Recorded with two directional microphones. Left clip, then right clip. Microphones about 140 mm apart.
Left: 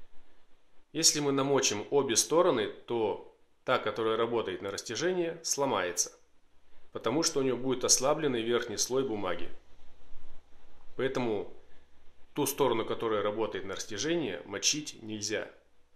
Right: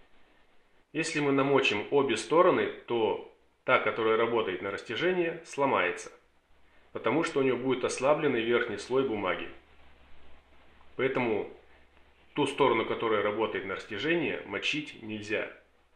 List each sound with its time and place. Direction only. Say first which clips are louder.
0.9 s speech: even; 20° left (ahead or behind)
6.9 s speech: right 2 dB; 20° left (ahead or behind)
11.0 s speech: right 3 dB; 20° left (ahead or behind)